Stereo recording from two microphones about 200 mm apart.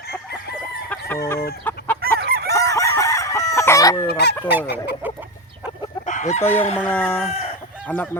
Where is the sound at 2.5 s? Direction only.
15° left (ahead or behind).